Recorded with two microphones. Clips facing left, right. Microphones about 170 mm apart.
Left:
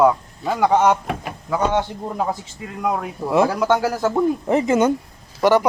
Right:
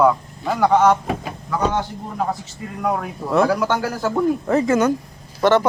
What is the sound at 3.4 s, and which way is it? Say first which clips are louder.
Speech: left 1 dB; 20° left (ahead or behind).